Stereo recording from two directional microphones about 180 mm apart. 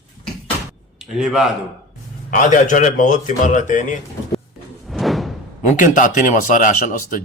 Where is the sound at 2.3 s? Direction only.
45° left (ahead or behind).